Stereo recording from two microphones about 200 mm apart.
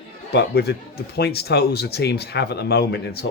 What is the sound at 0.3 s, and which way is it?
Speech, 55° left (ahead or behind).